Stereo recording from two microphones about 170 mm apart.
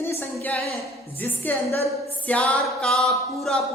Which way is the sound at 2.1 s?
10° left (ahead or behind).